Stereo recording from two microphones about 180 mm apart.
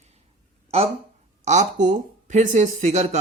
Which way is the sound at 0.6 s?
35° right (ahead or behind).